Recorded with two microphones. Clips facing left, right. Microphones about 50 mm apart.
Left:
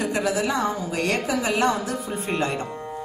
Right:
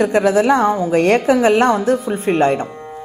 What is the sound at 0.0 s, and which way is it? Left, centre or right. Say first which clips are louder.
A woman's voice: right 10 dB; right.